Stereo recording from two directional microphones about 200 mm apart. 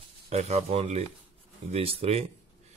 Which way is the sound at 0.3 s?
30° right (ahead or behind).